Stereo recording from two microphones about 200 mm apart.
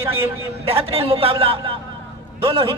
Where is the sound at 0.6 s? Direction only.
30° right (ahead or behind).